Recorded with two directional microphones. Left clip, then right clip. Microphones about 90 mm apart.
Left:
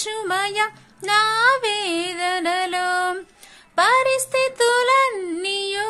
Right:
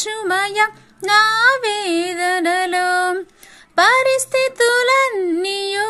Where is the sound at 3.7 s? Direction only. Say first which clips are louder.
Right 4 dB; 50° right (ahead or behind).